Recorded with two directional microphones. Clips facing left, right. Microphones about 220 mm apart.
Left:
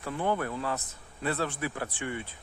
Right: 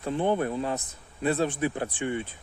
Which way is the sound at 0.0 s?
25° right (ahead or behind).